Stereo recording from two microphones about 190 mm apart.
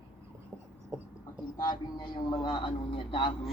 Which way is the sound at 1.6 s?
20° left (ahead or behind).